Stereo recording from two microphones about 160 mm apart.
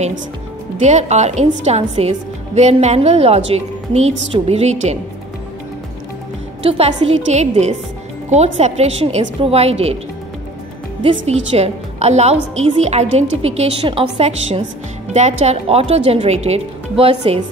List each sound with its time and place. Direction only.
0.7 s a woman's voice: 45° right (ahead or behind)
6.6 s a woman's voice: 40° right (ahead or behind)
11.0 s a woman's voice: 35° right (ahead or behind)